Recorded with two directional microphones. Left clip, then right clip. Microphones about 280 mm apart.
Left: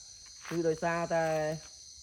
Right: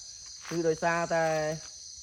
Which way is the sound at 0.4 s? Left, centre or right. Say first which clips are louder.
Right 3 dB; centre.